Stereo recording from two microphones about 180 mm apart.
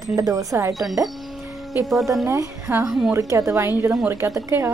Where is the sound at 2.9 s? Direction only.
Centre (ahead or behind).